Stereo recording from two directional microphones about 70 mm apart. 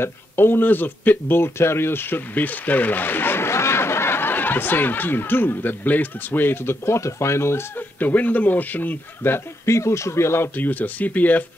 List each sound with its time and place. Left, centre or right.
0.0 s speech: left
8.0 s speech: left
9.7 s speech: left